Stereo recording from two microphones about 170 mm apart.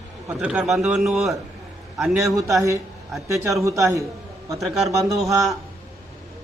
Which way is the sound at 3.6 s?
15° right (ahead or behind).